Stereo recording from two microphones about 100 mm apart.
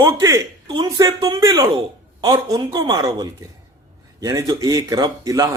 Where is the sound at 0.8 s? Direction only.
45° right (ahead or behind).